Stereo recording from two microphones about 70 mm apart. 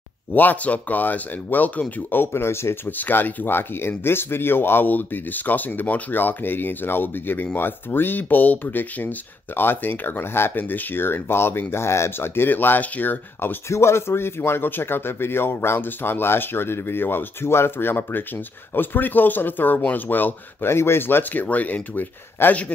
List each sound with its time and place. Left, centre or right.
0.3 s speech: left
13.7 s speech: left